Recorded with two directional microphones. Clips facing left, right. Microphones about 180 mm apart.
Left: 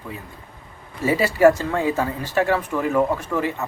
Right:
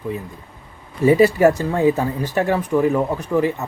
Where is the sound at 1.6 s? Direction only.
20° right (ahead or behind).